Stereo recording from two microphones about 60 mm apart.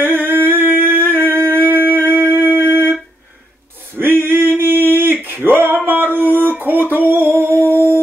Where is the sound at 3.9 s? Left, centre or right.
Right.